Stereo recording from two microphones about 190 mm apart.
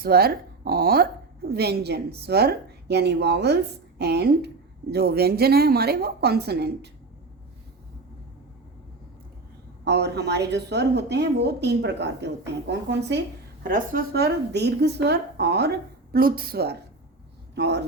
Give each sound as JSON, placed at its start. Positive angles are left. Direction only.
{"t": 0.0, "sound": "a woman's voice", "side_deg": -55}
{"t": 9.8, "sound": "a woman's voice", "side_deg": -60}
{"t": 16.1, "sound": "speech", "side_deg": -50}